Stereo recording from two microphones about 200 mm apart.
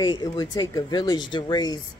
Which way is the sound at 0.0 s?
20° left (ahead or behind).